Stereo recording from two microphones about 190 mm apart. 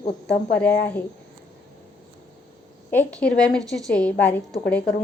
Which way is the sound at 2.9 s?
10° left (ahead or behind).